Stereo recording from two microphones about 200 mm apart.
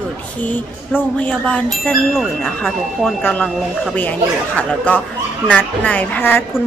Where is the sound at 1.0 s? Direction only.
5° left (ahead or behind).